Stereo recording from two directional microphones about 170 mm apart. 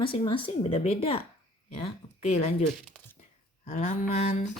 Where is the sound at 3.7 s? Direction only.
40° left (ahead or behind).